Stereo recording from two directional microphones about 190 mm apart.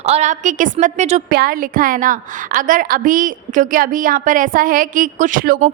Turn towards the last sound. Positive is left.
turn(degrees=-45)  # may be behind; listen again after turning